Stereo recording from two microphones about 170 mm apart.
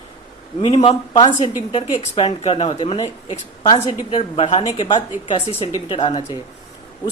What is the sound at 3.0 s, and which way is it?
A woman's voice, 40° left (ahead or behind).